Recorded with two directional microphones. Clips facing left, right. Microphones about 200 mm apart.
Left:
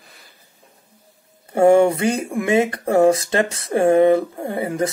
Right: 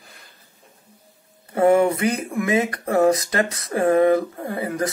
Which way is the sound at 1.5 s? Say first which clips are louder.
Left 3 dB; 30° left (ahead or behind).